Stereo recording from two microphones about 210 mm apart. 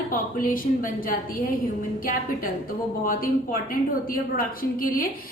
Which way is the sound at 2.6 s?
40° left (ahead or behind).